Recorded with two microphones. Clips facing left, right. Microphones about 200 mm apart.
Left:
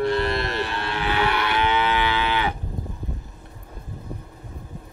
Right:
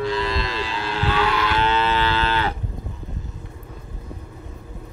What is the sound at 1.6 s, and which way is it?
Livestock, 15° left (ahead or behind).